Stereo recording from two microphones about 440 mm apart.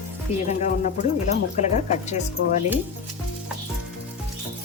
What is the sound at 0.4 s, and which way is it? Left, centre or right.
Speech, centre.